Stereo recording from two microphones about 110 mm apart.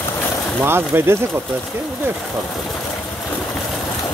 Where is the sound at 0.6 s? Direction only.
20° right (ahead or behind).